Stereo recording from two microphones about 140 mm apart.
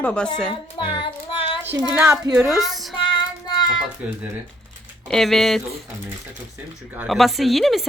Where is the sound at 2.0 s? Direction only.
25° right (ahead or behind).